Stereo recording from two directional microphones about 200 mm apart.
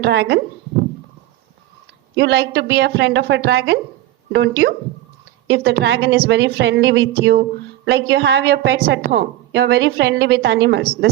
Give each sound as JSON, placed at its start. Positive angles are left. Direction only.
{"t": 0.0, "sound": "speech", "side_deg": -60}
{"t": 2.1, "sound": "a woman's voice", "side_deg": -60}